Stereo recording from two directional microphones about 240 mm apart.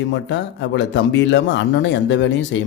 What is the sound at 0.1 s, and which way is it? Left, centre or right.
Speech, left.